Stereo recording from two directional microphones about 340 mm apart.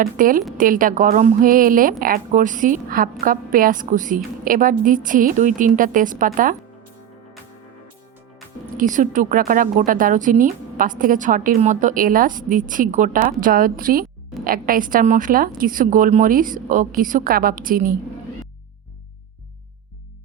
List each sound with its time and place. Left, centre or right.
0.0 s a woman's voice: right
8.8 s a woman's voice: right